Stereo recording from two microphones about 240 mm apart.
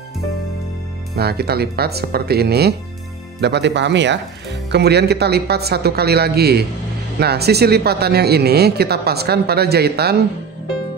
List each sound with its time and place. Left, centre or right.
1.1 s speech: right